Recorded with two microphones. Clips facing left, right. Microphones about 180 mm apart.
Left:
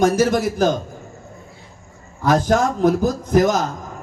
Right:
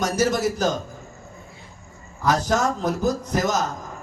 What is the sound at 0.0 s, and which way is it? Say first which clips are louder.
Speech: left 5 dB; 55° left (ahead or behind).